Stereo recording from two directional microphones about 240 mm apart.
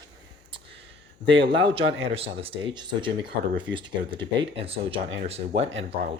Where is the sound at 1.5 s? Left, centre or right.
Right.